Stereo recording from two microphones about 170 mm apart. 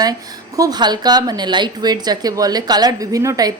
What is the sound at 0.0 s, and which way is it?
Speech, 20° right (ahead or behind).